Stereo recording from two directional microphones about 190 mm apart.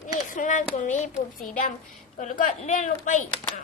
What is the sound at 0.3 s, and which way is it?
Speech, 45° left (ahead or behind).